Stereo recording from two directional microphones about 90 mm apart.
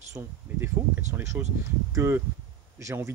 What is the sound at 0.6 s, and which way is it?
Speech, 20° right (ahead or behind).